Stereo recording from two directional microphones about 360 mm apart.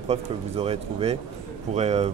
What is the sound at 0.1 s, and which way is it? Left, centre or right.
Speech, centre.